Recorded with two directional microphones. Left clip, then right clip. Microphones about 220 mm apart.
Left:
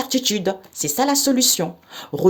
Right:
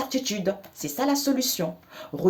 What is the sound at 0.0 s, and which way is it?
Speech, 45° left (ahead or behind).